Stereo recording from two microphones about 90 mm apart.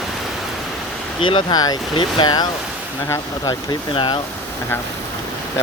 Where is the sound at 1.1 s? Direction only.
70° left (ahead or behind).